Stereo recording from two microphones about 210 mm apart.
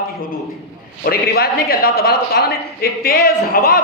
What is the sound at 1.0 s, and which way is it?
A woman's voice, 45° left (ahead or behind).